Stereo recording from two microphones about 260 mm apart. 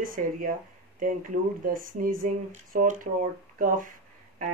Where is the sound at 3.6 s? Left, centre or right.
Right.